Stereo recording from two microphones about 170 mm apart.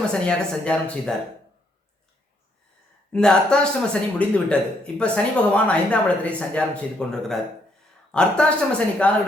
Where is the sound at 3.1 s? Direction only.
5° left (ahead or behind).